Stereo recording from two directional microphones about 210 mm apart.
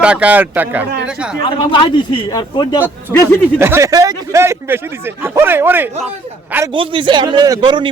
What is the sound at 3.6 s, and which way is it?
Speech, 10° right (ahead or behind).